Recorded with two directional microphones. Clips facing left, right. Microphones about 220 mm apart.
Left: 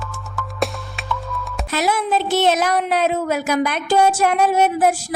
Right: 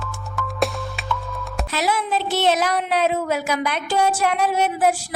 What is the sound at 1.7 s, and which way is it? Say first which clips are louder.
Speech: left 3 dB; 45° left (ahead or behind).